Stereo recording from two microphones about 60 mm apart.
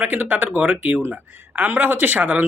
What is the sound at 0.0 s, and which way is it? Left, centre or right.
Speech, right.